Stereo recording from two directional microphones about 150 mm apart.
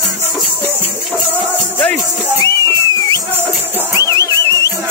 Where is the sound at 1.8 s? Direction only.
10° left (ahead or behind).